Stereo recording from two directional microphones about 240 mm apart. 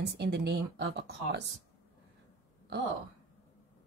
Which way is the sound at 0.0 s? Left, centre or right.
Right.